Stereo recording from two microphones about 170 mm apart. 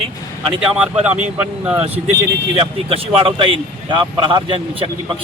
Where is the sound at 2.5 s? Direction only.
30° right (ahead or behind).